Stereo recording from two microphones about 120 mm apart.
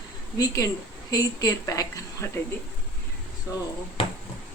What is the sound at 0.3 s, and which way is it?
A woman's voice, 30° left (ahead or behind).